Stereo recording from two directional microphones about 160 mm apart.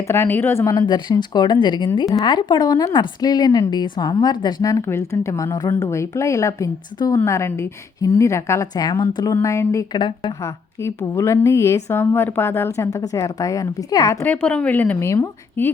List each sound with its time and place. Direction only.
0.0 s a woman's voice: 15° left (ahead or behind)
10.4 s a woman's voice: 15° left (ahead or behind)